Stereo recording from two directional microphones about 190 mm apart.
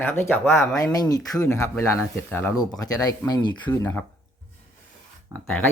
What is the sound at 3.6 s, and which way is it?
Speech, 10° left (ahead or behind).